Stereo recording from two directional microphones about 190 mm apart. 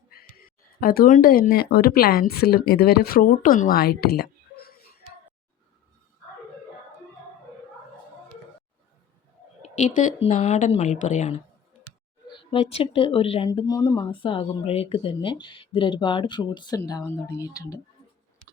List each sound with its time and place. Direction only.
0.1 s speech: 50° left (ahead or behind)
9.6 s speech: 40° left (ahead or behind)
12.3 s speech: 25° left (ahead or behind)